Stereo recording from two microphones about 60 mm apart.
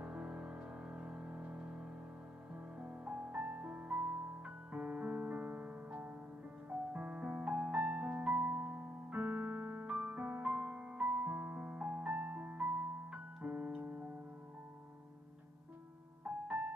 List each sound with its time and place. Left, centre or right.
0.0 s music: centre
8.4 s keyboard: right
16.3 s music: centre